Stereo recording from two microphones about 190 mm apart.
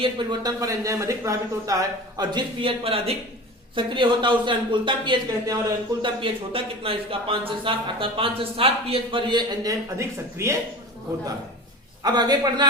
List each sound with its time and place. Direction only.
0.0 s speech: 25° right (ahead or behind)
12.0 s speech: 20° right (ahead or behind)